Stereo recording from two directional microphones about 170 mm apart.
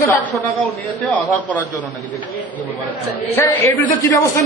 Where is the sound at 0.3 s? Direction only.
10° left (ahead or behind).